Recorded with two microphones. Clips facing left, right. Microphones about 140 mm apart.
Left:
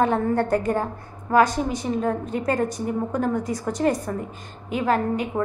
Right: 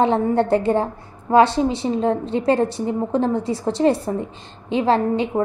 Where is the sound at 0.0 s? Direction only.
25° right (ahead or behind).